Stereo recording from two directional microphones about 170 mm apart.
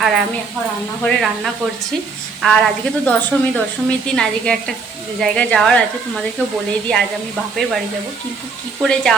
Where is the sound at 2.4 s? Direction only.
5° left (ahead or behind).